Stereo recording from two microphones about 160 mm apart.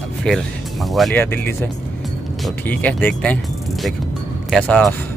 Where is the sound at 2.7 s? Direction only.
10° left (ahead or behind).